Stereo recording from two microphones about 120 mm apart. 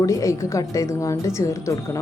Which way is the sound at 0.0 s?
30° left (ahead or behind).